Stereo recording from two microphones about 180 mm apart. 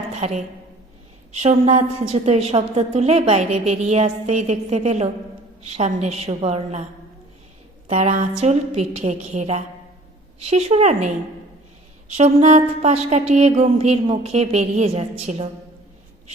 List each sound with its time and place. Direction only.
0.1 s a woman's voice: 40° right (ahead or behind)
7.9 s a woman's voice: 35° right (ahead or behind)
12.1 s a woman's voice: 40° right (ahead or behind)